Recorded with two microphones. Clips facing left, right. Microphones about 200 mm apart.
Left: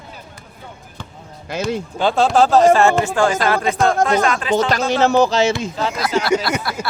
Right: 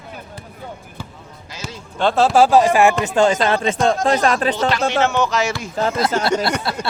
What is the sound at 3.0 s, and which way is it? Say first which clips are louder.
Speech: right 1 dB; 25° right (ahead or behind).